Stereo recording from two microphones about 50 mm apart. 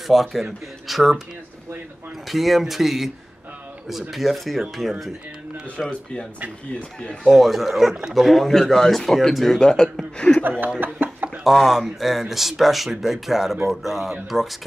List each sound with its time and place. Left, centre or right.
0.0 s speech: centre
2.2 s speech: centre
5.8 s speech: centre
7.3 s speech: centre
10.8 s a sound: right
11.2 s speech: centre